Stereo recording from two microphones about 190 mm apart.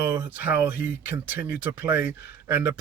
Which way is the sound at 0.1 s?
10° right (ahead or behind).